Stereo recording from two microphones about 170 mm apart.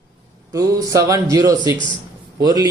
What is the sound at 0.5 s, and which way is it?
Speech, 20° right (ahead or behind).